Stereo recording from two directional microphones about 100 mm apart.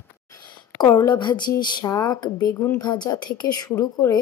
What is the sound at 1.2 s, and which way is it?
Speech, 45° left (ahead or behind).